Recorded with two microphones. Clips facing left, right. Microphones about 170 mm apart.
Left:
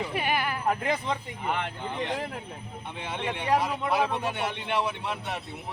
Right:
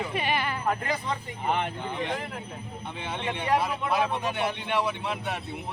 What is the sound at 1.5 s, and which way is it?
Speech, 20° right (ahead or behind).